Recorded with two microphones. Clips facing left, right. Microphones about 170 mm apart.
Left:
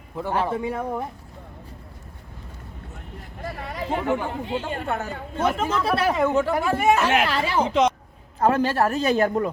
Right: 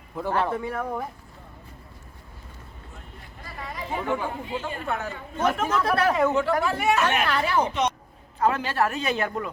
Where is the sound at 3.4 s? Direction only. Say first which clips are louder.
Left 5 dB; 60° left (ahead or behind).